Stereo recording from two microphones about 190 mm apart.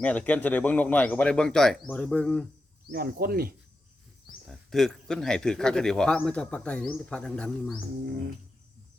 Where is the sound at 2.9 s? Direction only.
50° right (ahead or behind).